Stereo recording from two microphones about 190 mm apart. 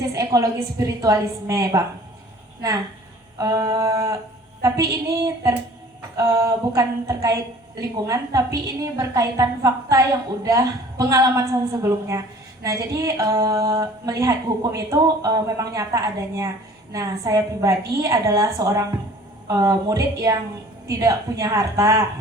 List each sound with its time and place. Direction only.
0.1 s speech: 15° right (ahead or behind)
3.3 s speech: 20° right (ahead or behind)